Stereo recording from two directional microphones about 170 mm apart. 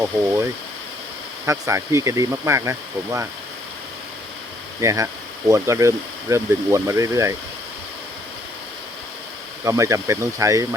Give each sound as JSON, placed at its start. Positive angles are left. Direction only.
{"t": 0.0, "sound": "speech", "side_deg": -15}
{"t": 1.5, "sound": "speech", "side_deg": -15}
{"t": 4.8, "sound": "speech", "side_deg": -20}
{"t": 9.6, "sound": "speech", "side_deg": -15}